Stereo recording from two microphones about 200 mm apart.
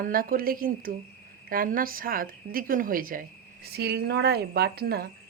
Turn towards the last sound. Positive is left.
turn(degrees=-50)  # may be behind; listen again after turning